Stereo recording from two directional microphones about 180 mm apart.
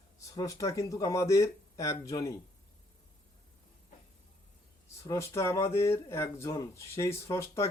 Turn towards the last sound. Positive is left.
turn(degrees=15)  # may be behind; listen again after turning